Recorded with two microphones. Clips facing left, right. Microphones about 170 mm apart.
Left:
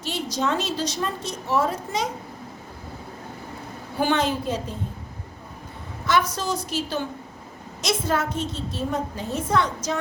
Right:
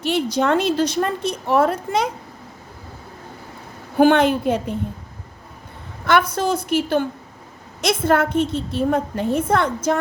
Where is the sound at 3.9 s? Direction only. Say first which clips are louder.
Right 8 dB; 55° right (ahead or behind).